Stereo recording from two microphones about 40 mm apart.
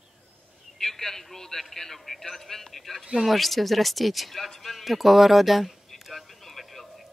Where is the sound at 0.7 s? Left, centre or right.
Centre.